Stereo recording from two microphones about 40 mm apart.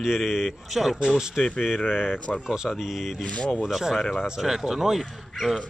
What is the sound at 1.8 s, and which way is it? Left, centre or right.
Speech, left.